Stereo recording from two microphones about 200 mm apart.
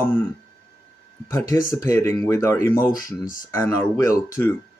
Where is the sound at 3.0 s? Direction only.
45° left (ahead or behind).